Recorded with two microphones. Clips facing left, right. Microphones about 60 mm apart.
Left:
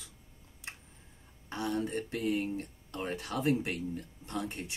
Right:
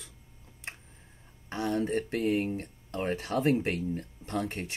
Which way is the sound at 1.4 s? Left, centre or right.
Right.